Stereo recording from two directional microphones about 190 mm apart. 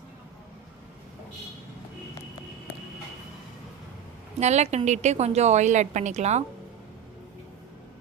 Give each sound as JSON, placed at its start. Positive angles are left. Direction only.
{"t": 4.4, "sound": "a woman's voice", "side_deg": -35}